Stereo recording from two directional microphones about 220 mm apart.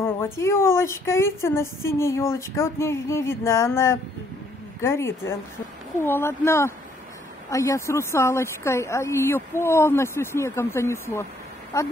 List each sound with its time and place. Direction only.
0.0 s a woman's voice: 10° left (ahead or behind)